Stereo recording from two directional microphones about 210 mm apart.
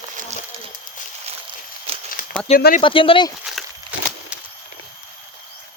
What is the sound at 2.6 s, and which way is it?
Speech, 45° left (ahead or behind).